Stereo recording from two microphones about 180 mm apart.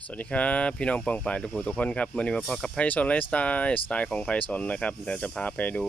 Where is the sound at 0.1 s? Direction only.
5° left (ahead or behind).